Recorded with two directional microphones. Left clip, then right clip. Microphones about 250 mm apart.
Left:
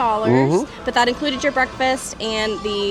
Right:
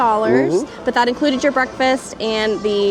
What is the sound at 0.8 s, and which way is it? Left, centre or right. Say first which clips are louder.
Speech: right 3 dB; centre.